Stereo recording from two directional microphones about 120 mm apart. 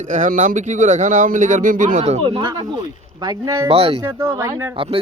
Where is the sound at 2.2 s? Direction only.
45° right (ahead or behind).